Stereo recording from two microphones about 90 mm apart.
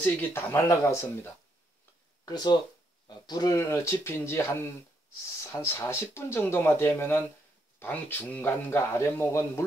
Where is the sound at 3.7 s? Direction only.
30° left (ahead or behind).